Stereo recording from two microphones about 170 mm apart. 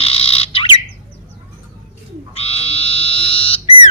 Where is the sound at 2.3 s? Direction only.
35° left (ahead or behind).